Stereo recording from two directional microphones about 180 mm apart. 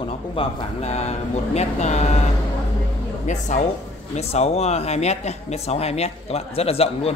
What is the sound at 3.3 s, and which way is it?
Speech, 40° left (ahead or behind).